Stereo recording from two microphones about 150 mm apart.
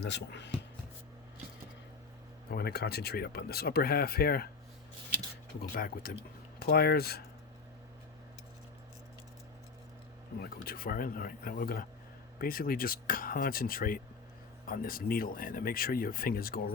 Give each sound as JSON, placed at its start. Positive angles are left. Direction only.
{"t": 2.5, "sound": "speech", "side_deg": 90}
{"t": 5.6, "sound": "speech", "side_deg": 70}
{"t": 6.6, "sound": "speech", "side_deg": 85}
{"t": 10.4, "sound": "speech", "side_deg": 80}